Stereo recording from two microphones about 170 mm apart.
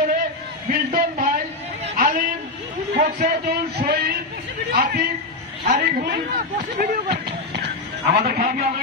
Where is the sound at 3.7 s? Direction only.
65° right (ahead or behind).